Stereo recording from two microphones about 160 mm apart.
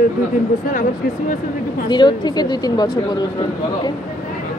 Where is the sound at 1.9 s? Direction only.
30° left (ahead or behind).